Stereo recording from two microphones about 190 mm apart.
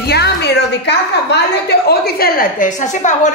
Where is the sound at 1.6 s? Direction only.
55° left (ahead or behind).